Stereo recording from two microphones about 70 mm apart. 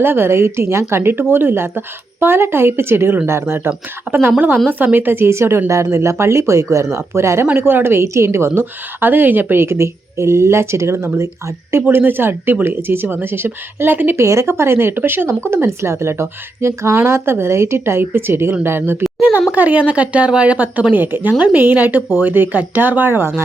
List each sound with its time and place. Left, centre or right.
0.0 s a woman's voice: right
4.1 s a woman's voice: right
14.2 s a woman's voice: right
19.5 s speech: right